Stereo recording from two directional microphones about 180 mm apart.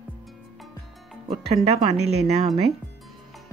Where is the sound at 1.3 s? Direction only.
35° right (ahead or behind).